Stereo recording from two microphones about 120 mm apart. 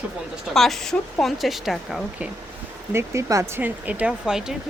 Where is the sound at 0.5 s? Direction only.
Centre (ahead or behind).